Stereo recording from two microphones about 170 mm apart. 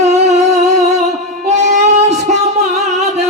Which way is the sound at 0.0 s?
40° right (ahead or behind).